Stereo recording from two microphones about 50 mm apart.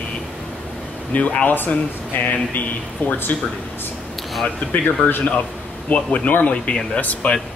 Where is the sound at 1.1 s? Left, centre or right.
Left.